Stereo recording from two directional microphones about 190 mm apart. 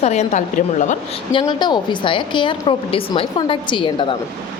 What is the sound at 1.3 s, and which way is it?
A woman's voice, 25° left (ahead or behind).